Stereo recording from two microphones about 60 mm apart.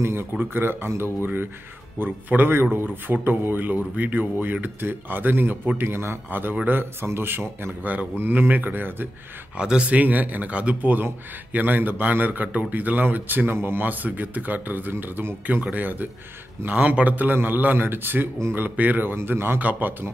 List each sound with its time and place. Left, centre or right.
0.0 s a man's voice: right
5.8 s a man's voice: right
9.6 s a man's voice: centre
19.1 s a man's voice: right
19.6 s a man's voice: right